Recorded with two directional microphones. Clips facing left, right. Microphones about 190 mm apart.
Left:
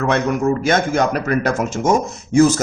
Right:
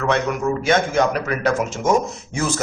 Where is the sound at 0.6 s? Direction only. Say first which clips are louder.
Left 1 dB; 45° left (ahead or behind).